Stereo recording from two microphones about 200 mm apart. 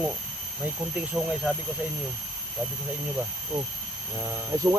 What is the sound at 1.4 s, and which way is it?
Speech, centre (ahead or behind).